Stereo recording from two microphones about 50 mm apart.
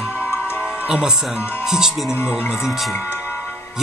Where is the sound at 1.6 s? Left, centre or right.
Centre.